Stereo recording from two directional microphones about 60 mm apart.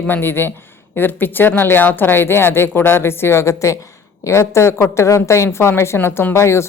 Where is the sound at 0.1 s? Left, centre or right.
Left.